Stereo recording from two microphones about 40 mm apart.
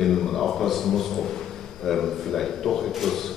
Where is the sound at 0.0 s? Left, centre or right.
Centre.